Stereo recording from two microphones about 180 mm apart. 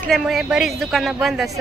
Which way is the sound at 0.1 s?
Centre (ahead or behind).